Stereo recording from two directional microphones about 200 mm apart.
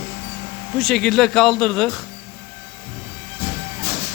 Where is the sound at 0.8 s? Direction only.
Centre (ahead or behind).